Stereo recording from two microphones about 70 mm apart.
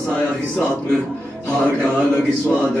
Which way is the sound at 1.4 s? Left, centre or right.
Centre.